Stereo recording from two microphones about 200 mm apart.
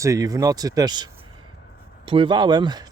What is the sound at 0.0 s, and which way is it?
Speech, 15° right (ahead or behind).